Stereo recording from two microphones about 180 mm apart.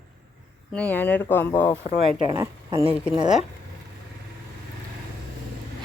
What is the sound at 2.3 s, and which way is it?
Speech, 20° right (ahead or behind).